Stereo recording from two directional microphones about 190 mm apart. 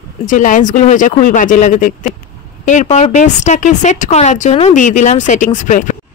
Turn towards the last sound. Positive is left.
turn(degrees=40)  # may be behind; listen again after turning